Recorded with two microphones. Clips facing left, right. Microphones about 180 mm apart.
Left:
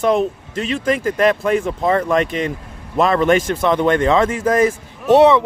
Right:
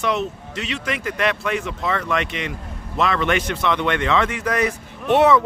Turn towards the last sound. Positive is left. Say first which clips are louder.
# left 4 dB
turn(degrees=30)  # may be behind; listen again after turning